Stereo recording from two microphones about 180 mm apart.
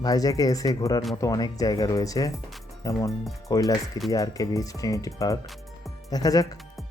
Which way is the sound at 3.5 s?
20° left (ahead or behind).